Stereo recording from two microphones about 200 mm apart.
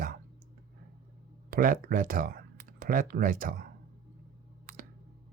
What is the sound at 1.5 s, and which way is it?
Speech, 45° right (ahead or behind).